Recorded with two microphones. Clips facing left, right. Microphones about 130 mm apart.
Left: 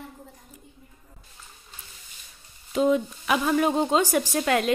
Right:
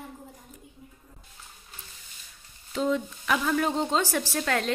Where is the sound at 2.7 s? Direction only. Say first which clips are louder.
Left 5 dB; 15° left (ahead or behind).